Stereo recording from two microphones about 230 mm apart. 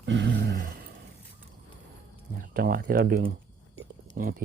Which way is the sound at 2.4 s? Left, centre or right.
Right.